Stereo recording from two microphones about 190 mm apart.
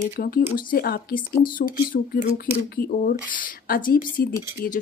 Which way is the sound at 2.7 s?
45° left (ahead or behind).